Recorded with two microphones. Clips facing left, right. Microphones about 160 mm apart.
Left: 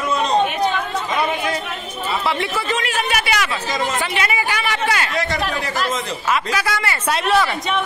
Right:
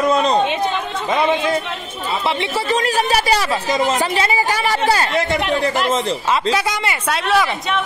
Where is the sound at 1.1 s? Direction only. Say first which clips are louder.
Right 6 dB; 25° right (ahead or behind).